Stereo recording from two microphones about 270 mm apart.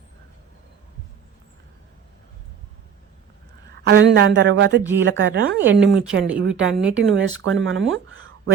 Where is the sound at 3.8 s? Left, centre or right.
Right.